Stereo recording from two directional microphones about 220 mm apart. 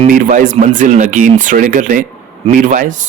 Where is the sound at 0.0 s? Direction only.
35° right (ahead or behind).